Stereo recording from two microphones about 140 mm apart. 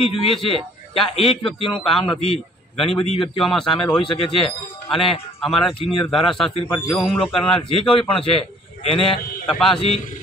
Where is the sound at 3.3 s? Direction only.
Centre (ahead or behind).